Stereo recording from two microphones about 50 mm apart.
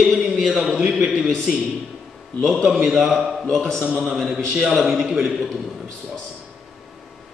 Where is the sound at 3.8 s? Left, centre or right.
Right.